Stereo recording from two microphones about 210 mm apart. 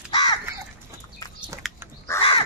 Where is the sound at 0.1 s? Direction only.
20° left (ahead or behind).